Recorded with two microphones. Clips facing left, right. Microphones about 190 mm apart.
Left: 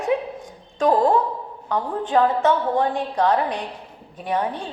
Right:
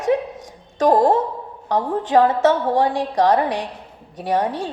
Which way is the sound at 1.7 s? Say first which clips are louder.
Right 4 dB; 90° right.